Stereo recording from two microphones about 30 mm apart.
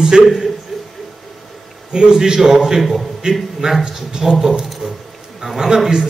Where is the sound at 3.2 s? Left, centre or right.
Right.